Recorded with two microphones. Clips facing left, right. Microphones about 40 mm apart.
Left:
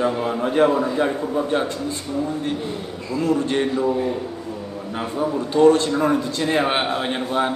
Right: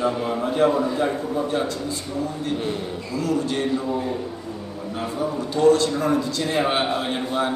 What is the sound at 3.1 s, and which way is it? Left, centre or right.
Speech, left.